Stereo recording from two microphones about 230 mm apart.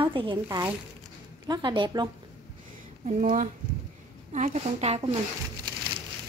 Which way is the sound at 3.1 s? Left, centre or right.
Right.